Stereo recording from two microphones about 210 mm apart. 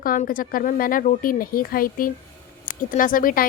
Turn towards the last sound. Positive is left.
turn(degrees=40)  # may be behind; listen again after turning